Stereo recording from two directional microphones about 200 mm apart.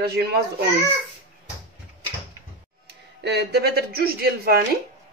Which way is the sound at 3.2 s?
55° right (ahead or behind).